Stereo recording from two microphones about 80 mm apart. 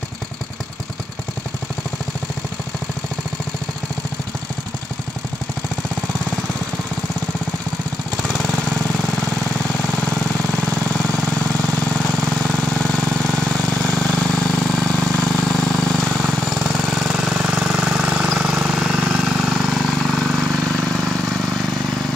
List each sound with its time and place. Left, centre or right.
8.2 s jackhammer: centre
12.4 s vehicle: centre
16.3 s lawn mower: centre
20.9 s vehicle: centre